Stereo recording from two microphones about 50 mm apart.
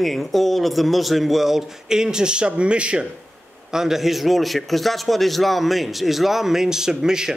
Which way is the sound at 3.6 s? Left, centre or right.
Centre.